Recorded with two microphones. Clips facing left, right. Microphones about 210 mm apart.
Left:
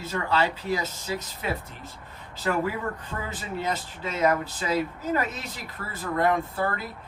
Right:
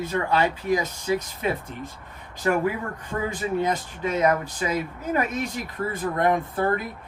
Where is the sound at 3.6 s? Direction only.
15° right (ahead or behind).